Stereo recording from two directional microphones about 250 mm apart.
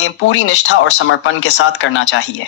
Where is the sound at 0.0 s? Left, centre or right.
Left.